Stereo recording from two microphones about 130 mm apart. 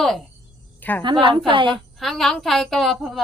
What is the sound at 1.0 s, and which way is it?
Speech, 40° right (ahead or behind).